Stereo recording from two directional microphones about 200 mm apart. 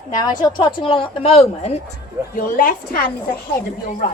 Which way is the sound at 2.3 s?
45° left (ahead or behind).